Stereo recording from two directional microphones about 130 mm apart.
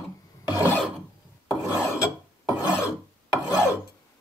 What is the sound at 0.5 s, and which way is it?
Filing, 15° right (ahead or behind).